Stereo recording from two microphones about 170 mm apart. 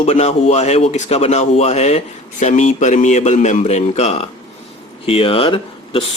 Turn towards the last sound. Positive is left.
turn(degrees=30)  # may be behind; listen again after turning